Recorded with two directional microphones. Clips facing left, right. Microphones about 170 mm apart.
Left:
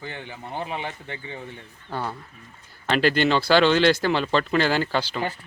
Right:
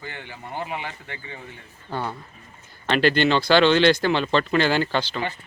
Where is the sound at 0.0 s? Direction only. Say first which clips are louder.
Left 1 dB; 20° left (ahead or behind).